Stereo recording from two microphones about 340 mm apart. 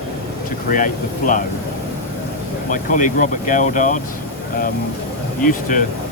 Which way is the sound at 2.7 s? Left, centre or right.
Left.